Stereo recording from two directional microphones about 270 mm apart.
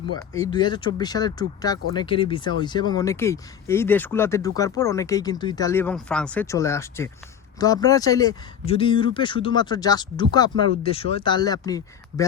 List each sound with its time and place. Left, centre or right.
0.4 s speech: centre